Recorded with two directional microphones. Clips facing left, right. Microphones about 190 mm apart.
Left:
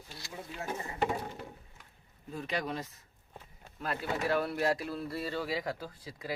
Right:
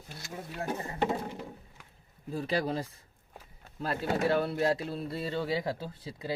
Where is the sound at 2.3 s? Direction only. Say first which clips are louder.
Right 5 dB; 35° right (ahead or behind).